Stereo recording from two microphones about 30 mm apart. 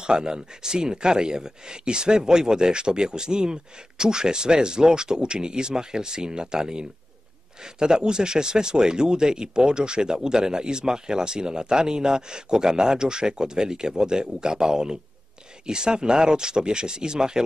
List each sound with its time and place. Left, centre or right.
0.0 s speech: right